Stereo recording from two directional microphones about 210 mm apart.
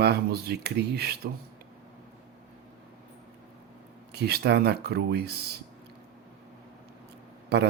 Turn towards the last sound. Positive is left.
turn(degrees=-50)  # may be behind; listen again after turning